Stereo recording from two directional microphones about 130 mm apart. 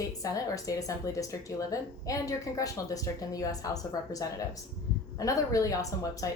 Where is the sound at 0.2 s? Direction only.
25° left (ahead or behind).